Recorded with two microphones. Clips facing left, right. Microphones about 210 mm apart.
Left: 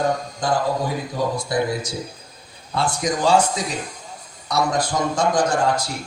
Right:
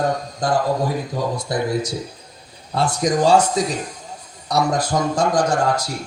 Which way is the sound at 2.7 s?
40° right (ahead or behind).